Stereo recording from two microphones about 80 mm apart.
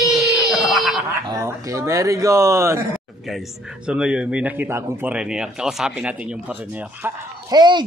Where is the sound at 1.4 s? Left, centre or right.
Right.